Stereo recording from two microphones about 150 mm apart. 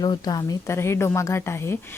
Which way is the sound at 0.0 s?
25° left (ahead or behind).